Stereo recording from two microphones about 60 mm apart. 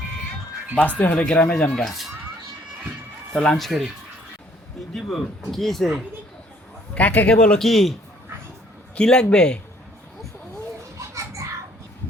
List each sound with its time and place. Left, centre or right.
0.8 s speech: left
1.2 s speech: centre
1.8 s speech: centre
3.3 s speech: centre
4.9 s speech: centre
6.9 s speech: left
7.6 s speech: centre
9.0 s speech: centre
10.9 s children playing: right